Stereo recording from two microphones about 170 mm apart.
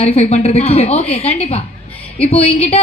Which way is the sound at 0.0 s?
35° left (ahead or behind).